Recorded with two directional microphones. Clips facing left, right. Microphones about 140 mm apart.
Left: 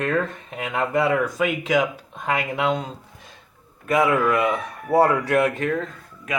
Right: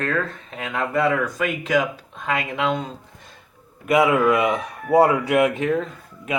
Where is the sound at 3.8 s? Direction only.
15° right (ahead or behind).